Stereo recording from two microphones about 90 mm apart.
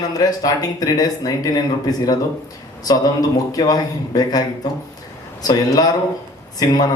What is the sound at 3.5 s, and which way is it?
Speech, 45° left (ahead or behind).